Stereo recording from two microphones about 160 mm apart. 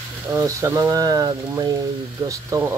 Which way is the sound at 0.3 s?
20° right (ahead or behind).